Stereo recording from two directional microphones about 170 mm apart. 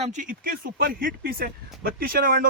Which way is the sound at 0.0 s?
45° right (ahead or behind).